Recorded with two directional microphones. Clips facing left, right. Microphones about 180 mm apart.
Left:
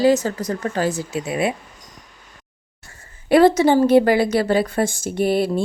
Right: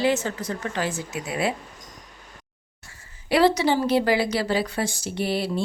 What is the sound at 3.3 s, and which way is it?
A woman's voice, 50° left (ahead or behind).